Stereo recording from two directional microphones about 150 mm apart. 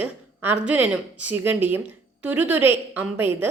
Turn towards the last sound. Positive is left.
turn(degrees=-15)  # may be behind; listen again after turning